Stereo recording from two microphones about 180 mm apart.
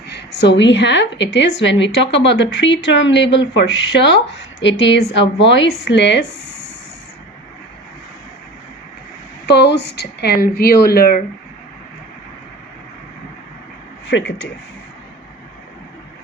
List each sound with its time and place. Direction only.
0.1 s a woman's voice: 75° left (ahead or behind)
4.6 s a woman's voice: 90° left
9.5 s speech: 70° left (ahead or behind)
14.1 s speech: 80° left